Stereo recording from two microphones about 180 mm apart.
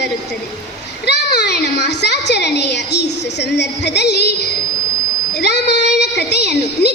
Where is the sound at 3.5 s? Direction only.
70° left (ahead or behind).